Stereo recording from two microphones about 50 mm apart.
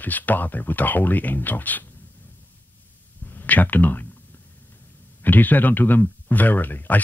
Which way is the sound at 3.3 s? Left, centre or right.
Left.